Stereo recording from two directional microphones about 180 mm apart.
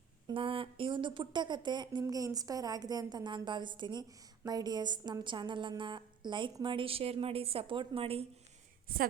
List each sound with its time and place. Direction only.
0.3 s a woman's voice: 30° right (ahead or behind)